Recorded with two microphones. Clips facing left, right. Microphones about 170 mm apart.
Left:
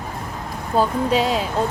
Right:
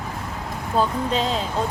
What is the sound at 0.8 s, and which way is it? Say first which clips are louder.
Speech: left 4 dB; 10° left (ahead or behind).